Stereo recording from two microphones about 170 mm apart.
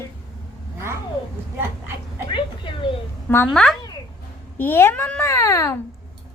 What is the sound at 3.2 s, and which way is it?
Speech, 10° left (ahead or behind).